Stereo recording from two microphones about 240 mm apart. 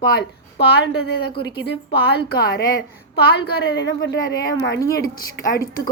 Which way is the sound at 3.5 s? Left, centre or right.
Left.